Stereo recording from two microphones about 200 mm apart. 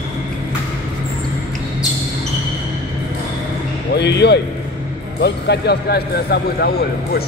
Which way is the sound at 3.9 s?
60° left (ahead or behind).